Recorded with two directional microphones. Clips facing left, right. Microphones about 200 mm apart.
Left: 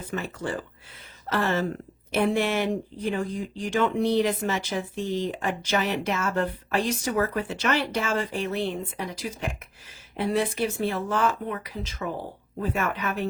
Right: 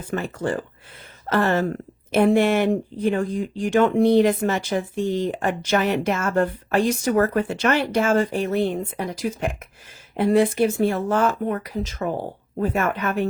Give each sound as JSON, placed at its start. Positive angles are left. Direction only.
{"t": 0.1, "sound": "speech", "side_deg": -50}